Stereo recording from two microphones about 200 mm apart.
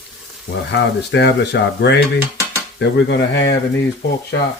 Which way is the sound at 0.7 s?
60° left (ahead or behind).